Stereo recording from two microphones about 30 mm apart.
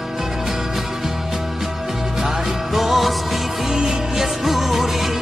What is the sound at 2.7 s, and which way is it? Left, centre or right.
Music, centre.